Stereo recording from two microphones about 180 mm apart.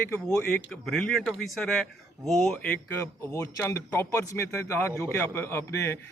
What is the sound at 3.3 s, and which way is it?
A man's voice, 15° left (ahead or behind).